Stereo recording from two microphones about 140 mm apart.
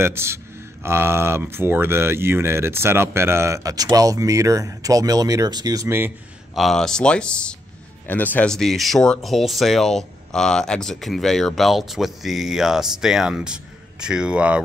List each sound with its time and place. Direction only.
0.0 s speech: 20° right (ahead or behind)
6.5 s speech: centre (ahead or behind)